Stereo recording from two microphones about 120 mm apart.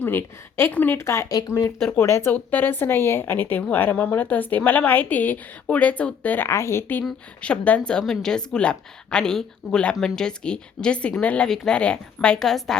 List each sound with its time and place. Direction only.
0.0 s a woman's voice: 20° left (ahead or behind); by 12.7 s centre (ahead or behind)